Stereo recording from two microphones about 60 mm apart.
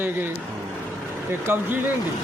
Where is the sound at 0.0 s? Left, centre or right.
Right.